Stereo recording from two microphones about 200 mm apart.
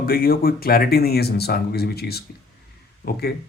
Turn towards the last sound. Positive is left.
turn(degrees=50)  # may be behind; listen again after turning